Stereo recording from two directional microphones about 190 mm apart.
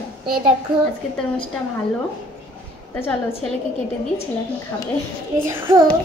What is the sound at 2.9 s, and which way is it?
Speech, 10° left (ahead or behind).